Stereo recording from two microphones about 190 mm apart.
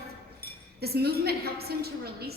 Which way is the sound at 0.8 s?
55° right (ahead or behind).